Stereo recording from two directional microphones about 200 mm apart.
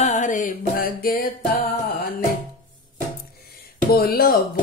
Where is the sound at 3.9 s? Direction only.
50° left (ahead or behind).